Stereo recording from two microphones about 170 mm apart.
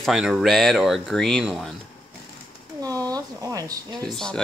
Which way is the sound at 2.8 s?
20° right (ahead or behind).